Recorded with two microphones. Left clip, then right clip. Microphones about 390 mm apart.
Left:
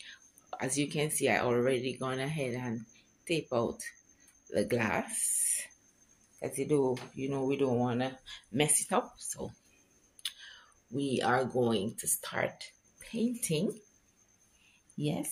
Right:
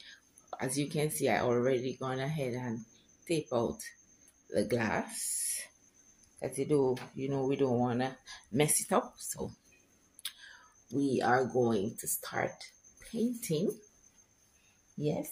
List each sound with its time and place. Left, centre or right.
0.0 s speech: right
15.0 s speech: right